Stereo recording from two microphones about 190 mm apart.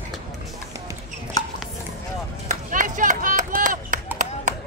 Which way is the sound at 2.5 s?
40° right (ahead or behind).